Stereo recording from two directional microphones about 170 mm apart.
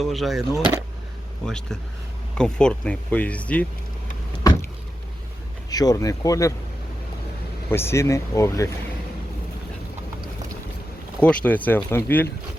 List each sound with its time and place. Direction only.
0.0 s speech: centre (ahead or behind)
5.7 s speech: 20° left (ahead or behind)
7.7 s speech: 15° left (ahead or behind)
11.2 s speech: 10° left (ahead or behind)